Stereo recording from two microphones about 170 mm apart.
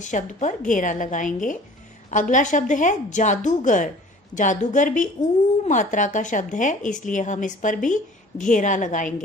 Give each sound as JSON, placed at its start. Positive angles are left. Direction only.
{"t": 0.0, "sound": "speech", "side_deg": 45}